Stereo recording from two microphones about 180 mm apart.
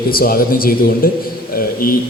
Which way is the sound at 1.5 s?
55° left (ahead or behind).